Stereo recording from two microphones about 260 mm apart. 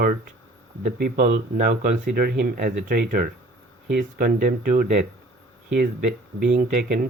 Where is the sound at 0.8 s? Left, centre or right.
Right.